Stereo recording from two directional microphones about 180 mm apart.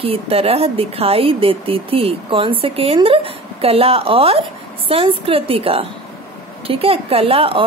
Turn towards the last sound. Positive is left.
turn(degrees=-30)  # may be behind; listen again after turning